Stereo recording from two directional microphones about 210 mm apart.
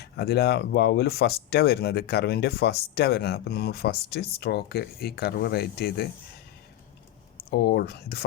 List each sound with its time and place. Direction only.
0.0 s speech: 50° left (ahead or behind)
7.5 s speech: 55° left (ahead or behind)